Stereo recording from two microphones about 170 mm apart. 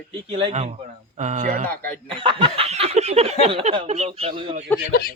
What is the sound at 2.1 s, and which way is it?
Snicker, 30° right (ahead or behind).